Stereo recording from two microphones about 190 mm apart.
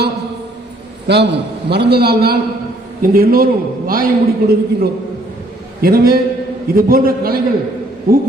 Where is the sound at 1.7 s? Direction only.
60° right (ahead or behind).